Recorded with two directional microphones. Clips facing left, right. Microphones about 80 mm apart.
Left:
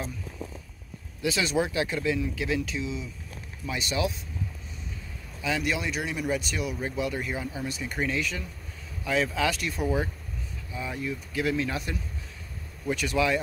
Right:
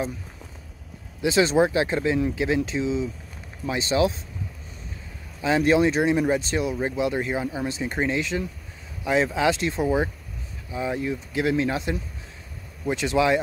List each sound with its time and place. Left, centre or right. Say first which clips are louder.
1.2 s speech: right 7 dB; right
5.4 s speech: right 10 dB; right